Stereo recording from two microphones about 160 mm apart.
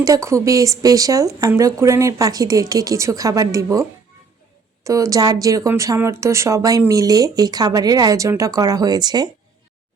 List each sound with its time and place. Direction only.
0.0 s speech: 20° right (ahead or behind)